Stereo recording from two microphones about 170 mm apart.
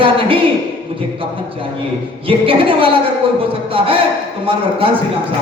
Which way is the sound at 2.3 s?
30° right (ahead or behind).